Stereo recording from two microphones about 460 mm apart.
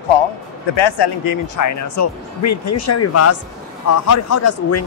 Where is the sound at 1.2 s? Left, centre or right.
Left.